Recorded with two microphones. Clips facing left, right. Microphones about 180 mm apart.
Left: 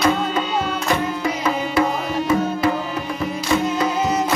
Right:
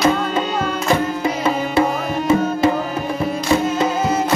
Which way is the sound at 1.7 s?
25° right (ahead or behind).